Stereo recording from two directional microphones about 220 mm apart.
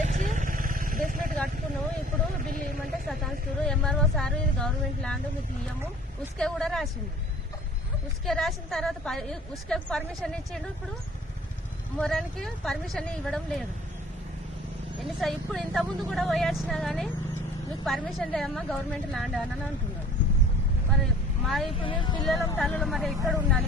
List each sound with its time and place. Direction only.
0.0 s vehicle: 35° right (ahead or behind)
2.4 s a sound: 40° right (ahead or behind)
2.9 s a sound: centre (ahead or behind)
6.4 s a woman's voice: centre (ahead or behind)
8.2 s a woman's voice: centre (ahead or behind)
11.9 s a woman's voice: 5° left (ahead or behind)
15.0 s a woman's voice: centre (ahead or behind)
21.4 s a woman's voice: centre (ahead or behind)
21.8 s speech: 25° left (ahead or behind)
22.5 s a woman's voice: centre (ahead or behind)